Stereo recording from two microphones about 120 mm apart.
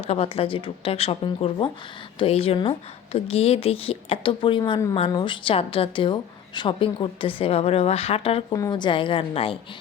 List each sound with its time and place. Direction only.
0.1 s a woman's voice: 55° left (ahead or behind)
8.4 s a woman's voice: 30° left (ahead or behind); by 9.6 s 50° left (ahead or behind)